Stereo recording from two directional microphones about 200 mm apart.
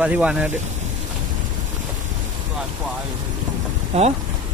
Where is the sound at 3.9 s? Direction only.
30° right (ahead or behind).